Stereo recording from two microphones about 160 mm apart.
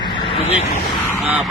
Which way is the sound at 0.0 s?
30° left (ahead or behind).